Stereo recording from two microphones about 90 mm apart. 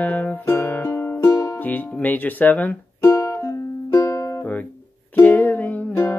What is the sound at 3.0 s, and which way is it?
Music, 40° left (ahead or behind).